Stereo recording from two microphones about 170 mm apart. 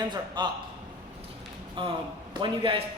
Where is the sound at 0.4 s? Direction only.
25° right (ahead or behind).